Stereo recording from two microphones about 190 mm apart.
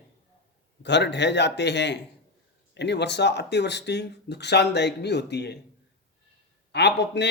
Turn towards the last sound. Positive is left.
turn(degrees=65)  # may be behind; listen again after turning